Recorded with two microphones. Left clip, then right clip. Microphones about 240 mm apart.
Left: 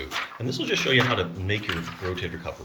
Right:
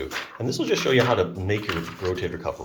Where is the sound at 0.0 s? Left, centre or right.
Centre.